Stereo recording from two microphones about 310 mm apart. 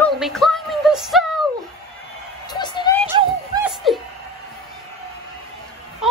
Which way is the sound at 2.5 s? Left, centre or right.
Centre.